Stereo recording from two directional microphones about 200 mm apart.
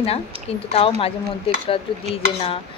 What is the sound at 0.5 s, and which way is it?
Speech, 30° left (ahead or behind).